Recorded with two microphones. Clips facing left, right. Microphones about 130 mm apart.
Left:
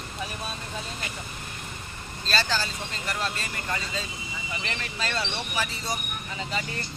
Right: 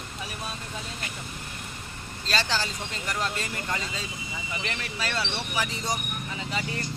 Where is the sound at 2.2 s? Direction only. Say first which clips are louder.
Left 1 dB; 15° right (ahead or behind).